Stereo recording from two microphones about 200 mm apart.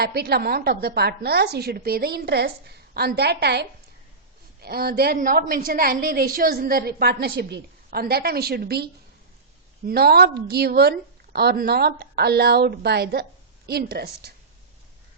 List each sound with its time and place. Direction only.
0.0 s a woman's voice: 50° right (ahead or behind)